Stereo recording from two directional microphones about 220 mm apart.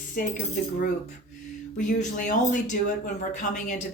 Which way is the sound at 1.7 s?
35° left (ahead or behind).